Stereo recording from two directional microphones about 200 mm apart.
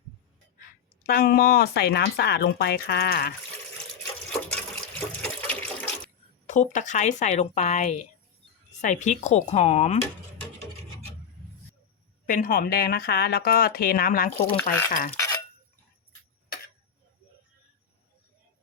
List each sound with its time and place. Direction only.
1.0 s speech: 50° left (ahead or behind)
4.0 s water: 5° left (ahead or behind)
6.5 s speech: 40° left (ahead or behind)
12.2 s speech: 45° left (ahead or behind)